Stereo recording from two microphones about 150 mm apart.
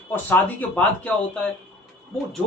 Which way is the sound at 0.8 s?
10° left (ahead or behind).